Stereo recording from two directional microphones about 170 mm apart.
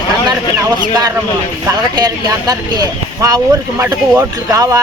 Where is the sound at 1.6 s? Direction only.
20° right (ahead or behind).